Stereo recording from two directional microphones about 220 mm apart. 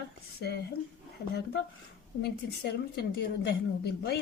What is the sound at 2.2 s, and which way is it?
A woman's voice, 45° left (ahead or behind).